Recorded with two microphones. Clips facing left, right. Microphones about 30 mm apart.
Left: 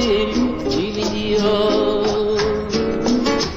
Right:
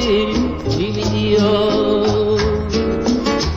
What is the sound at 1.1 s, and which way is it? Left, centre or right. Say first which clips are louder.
Music: right 3 dB; right.